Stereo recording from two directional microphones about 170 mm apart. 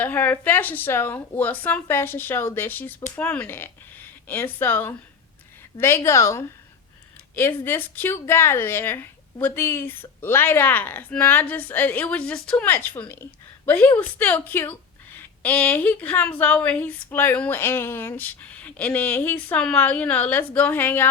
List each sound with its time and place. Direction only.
0.0 s a woman's voice: 10° left (ahead or behind)